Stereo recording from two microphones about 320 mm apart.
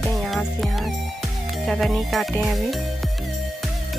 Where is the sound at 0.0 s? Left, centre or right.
Centre.